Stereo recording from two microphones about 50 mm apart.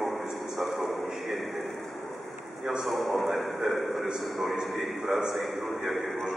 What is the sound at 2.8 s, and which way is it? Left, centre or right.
A man's voice, centre.